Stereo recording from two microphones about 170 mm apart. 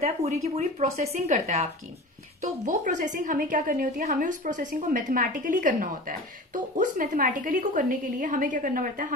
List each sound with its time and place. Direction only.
0.0 s a woman's voice: 40° right (ahead or behind)